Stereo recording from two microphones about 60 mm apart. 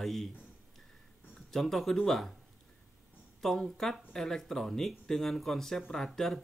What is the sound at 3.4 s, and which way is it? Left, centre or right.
Speech, centre.